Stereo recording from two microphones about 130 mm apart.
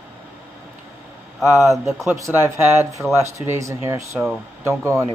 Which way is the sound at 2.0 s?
25° right (ahead or behind).